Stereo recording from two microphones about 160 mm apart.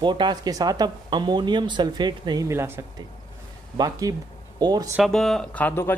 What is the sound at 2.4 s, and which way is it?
Speech, 15° right (ahead or behind).